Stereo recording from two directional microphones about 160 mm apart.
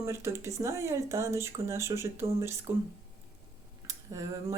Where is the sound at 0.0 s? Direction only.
15° right (ahead or behind).